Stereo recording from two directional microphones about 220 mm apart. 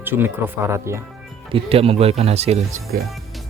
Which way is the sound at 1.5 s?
25° right (ahead or behind).